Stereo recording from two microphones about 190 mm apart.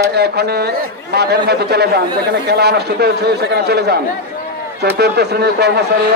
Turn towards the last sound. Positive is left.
turn(degrees=-60)  # may be behind; listen again after turning